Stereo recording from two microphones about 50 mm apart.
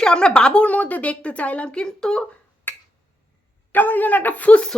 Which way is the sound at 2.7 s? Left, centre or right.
Left.